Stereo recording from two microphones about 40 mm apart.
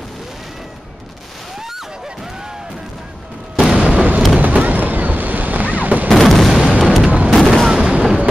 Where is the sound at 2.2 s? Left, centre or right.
Centre.